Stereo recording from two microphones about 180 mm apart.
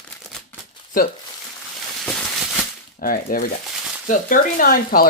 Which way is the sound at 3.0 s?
50° left (ahead or behind).